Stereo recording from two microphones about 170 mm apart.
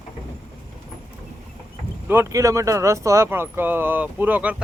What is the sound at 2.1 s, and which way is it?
Speech, 15° right (ahead or behind).